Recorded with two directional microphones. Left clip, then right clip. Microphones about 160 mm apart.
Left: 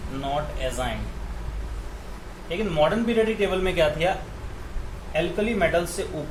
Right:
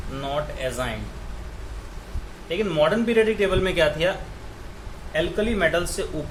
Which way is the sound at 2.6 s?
45° right (ahead or behind).